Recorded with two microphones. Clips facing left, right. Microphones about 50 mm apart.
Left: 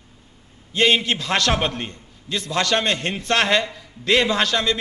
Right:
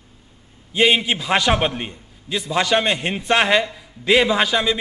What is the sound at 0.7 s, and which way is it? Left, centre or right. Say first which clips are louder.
A man's voice: right 1 dB; centre.